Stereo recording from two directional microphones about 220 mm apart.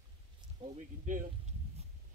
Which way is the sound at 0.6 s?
35° right (ahead or behind).